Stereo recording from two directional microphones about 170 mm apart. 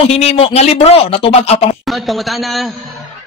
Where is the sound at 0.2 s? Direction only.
40° left (ahead or behind).